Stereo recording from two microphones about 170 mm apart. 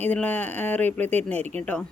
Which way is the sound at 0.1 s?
10° left (ahead or behind).